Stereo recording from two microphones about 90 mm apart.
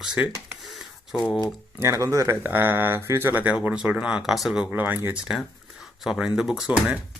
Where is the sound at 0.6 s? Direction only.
Centre (ahead or behind).